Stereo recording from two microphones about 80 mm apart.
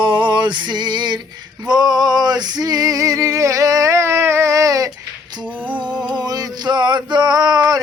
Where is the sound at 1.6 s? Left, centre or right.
Right.